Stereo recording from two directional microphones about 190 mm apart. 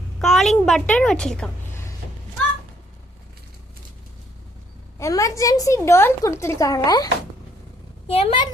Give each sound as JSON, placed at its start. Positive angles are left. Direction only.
{"t": 0.2, "sound": "a sound", "side_deg": 0}
{"t": 4.9, "sound": "a woman's voice", "side_deg": 15}
{"t": 8.0, "sound": "a woman's voice", "side_deg": 30}